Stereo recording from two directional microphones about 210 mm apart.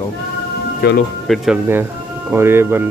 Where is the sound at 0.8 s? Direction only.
45° left (ahead or behind).